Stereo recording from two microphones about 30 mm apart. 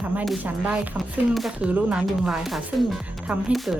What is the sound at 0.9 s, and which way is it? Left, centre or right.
Speech, centre.